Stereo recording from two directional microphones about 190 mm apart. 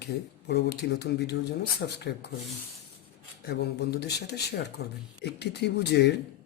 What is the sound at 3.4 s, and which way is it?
Speech, 60° left (ahead or behind).